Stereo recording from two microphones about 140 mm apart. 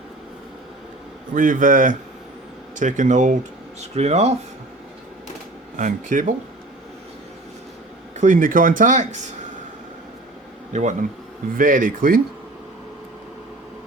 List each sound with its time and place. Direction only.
1.3 s speech: 75° right (ahead or behind)
3.8 s speech: 50° right (ahead or behind)
5.7 s speech: 65° right (ahead or behind)
8.2 s speech: 70° right (ahead or behind)
10.7 s speech: 55° right (ahead or behind)
11.5 s speech: 75° right (ahead or behind)